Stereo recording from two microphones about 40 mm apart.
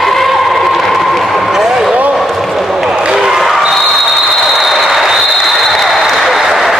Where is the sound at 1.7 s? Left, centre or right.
Centre.